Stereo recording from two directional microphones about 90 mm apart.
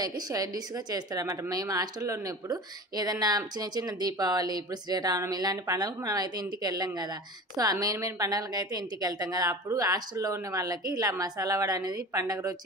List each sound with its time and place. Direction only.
0.0 s a woman's voice: 45° right (ahead or behind)